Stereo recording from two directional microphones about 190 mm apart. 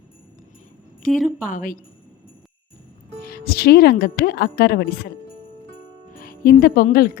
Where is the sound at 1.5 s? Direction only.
45° left (ahead or behind).